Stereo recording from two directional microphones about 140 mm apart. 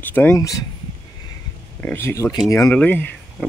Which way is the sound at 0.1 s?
15° left (ahead or behind).